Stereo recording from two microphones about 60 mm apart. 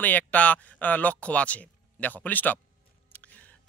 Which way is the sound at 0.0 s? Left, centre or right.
Left.